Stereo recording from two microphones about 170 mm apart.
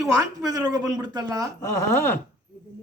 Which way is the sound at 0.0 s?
20° right (ahead or behind).